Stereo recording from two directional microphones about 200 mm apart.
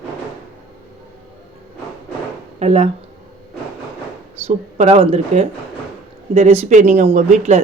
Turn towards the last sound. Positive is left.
turn(degrees=-35)  # may be behind; listen again after turning